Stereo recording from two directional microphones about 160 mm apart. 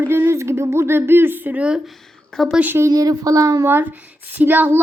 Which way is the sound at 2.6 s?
15° right (ahead or behind).